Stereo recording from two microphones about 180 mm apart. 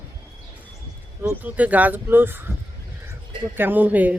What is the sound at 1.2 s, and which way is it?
Speech, 10° right (ahead or behind).